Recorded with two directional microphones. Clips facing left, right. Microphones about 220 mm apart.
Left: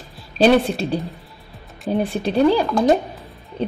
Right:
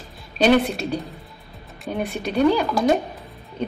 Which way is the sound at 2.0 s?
30° left (ahead or behind).